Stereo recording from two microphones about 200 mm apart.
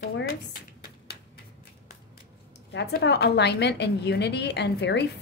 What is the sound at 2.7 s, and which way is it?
A woman's voice, 60° left (ahead or behind).